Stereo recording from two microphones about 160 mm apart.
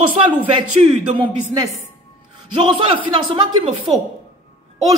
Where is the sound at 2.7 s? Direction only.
30° right (ahead or behind).